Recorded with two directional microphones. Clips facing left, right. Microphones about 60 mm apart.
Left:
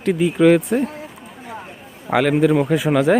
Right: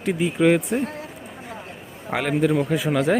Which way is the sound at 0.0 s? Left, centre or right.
Left.